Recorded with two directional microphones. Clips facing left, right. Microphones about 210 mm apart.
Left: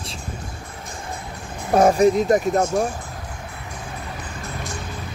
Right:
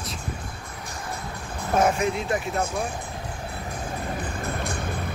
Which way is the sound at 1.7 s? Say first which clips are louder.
Left 7 dB; 35° left (ahead or behind).